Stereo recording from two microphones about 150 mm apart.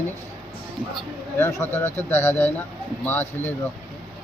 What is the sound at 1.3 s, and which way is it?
Speech, 15° left (ahead or behind).